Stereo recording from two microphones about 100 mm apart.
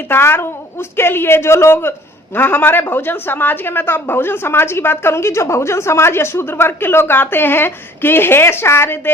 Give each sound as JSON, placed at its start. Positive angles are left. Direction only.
{"t": 0.1, "sound": "a woman's voice", "side_deg": 25}